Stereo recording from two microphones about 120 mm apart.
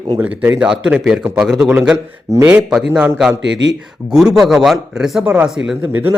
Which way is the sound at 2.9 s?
15° right (ahead or behind).